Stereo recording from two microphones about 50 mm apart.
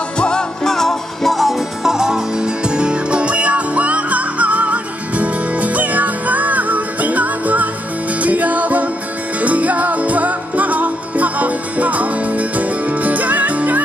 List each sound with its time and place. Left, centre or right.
0.2 s music: centre; by 13.7 s right